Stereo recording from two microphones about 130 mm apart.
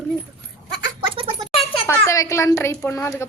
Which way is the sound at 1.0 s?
45° right (ahead or behind).